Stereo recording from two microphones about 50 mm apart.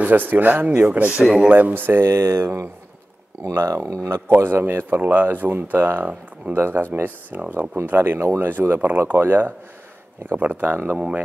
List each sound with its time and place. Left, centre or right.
0.0 s speech: right
0.8 s speech: right
1.2 s speech: centre
1.5 s speech: right
4.4 s speech: right
7.8 s speech: right
8.8 s speech: right